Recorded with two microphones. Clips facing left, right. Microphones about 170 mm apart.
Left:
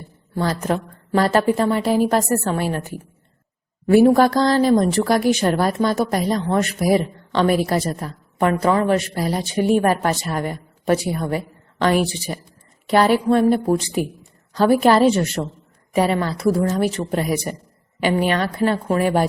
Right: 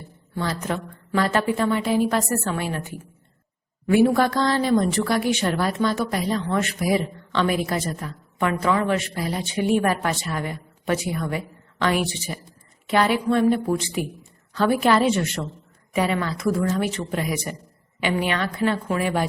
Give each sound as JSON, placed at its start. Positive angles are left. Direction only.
{"t": 0.3, "sound": "a woman's voice", "side_deg": 40}